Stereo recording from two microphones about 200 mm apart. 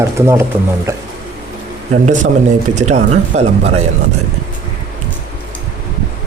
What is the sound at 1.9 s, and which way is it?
Speech, 35° right (ahead or behind).